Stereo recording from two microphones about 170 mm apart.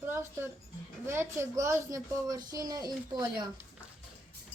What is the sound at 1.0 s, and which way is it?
A woman's voice, 15° right (ahead or behind).